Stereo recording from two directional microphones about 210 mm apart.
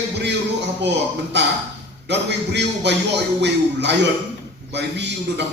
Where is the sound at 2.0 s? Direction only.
55° right (ahead or behind).